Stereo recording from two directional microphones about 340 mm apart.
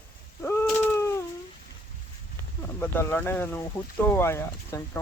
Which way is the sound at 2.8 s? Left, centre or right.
Centre.